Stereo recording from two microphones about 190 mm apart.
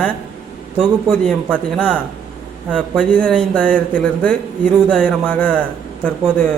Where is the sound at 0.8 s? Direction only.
Centre (ahead or behind).